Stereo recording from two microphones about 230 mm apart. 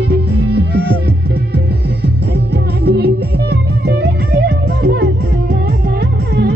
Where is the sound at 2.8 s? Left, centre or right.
Right.